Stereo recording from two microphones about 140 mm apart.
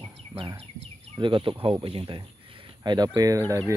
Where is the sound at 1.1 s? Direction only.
35° right (ahead or behind); by 3.7 s 20° right (ahead or behind).